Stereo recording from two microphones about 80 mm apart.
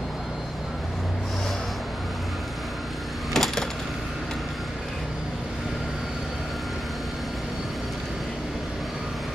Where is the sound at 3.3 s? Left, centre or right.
Centre.